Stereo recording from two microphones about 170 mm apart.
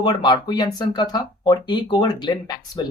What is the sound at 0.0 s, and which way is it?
Speech, 25° left (ahead or behind).